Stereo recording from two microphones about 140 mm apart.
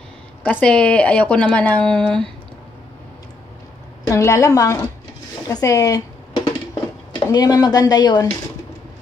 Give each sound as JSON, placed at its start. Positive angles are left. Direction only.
{"t": 0.4, "sound": "speech", "side_deg": 10}
{"t": 4.1, "sound": "speech", "side_deg": 20}